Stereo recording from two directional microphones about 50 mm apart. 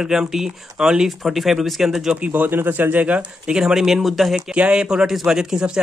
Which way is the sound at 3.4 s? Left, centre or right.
Centre.